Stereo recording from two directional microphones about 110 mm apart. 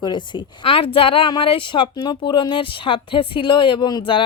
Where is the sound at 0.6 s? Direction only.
60° left (ahead or behind).